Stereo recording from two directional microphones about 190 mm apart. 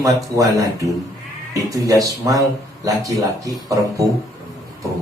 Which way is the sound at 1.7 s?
20° right (ahead or behind).